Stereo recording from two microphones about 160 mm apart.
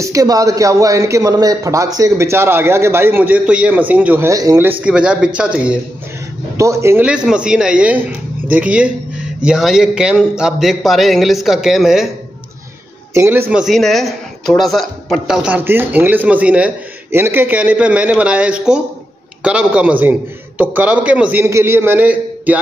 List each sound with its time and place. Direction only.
0.0 s speech: 20° right (ahead or behind)
4.8 s speech: 5° right (ahead or behind)
6.5 s speech: 20° right (ahead or behind)
7.1 s speech: 5° right (ahead or behind)
13.1 s speech: 15° right (ahead or behind)